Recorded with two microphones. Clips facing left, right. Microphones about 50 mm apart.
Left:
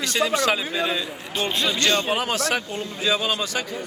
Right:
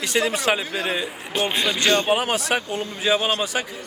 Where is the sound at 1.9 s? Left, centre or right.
Right.